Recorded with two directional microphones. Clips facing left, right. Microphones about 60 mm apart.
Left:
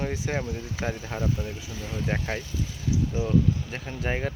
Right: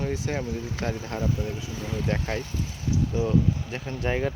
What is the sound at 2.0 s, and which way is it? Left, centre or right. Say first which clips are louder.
Speech: even; centre.